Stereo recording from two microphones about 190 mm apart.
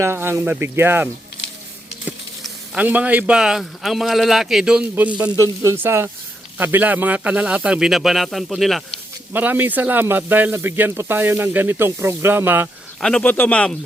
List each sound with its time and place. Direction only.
0.0 s speech: 15° right (ahead or behind)
13.0 s speech: 5° left (ahead or behind)